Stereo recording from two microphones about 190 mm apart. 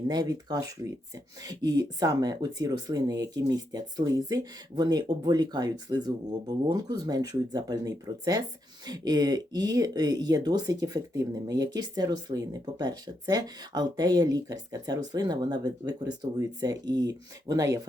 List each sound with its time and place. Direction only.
0.1 s speech: 20° right (ahead or behind)